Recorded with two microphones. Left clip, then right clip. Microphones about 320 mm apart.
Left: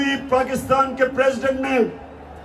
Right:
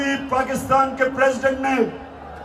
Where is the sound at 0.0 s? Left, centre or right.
Centre.